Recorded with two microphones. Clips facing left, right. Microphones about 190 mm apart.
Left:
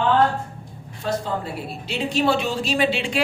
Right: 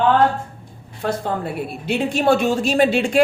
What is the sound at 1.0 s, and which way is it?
A woman's voice, 55° right (ahead or behind).